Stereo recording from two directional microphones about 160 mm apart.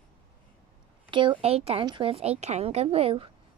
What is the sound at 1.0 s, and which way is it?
A woman's voice, 30° right (ahead or behind).